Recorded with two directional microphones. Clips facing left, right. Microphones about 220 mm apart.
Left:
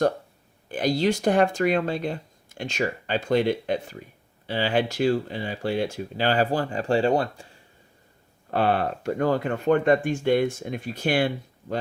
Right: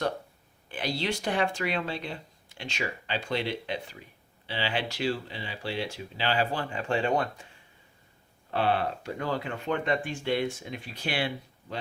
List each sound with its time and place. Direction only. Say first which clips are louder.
0.7 s speech: left 8 dB; 45° left (ahead or behind)
8.4 s speech: left 4 dB; 45° left (ahead or behind)